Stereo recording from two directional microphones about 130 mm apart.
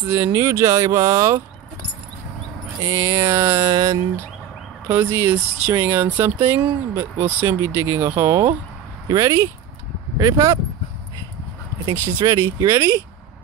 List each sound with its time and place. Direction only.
0.1 s speech: 20° right (ahead or behind)
2.8 s speech: 20° right (ahead or behind)
11.9 s speech: 25° right (ahead or behind)